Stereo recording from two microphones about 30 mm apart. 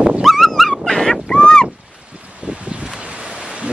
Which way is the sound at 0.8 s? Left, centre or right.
Centre.